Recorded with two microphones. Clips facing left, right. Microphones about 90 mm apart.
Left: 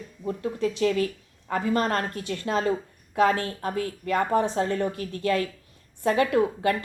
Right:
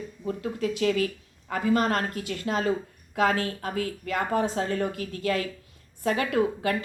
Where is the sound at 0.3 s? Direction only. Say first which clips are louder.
Left 2 dB; 30° left (ahead or behind).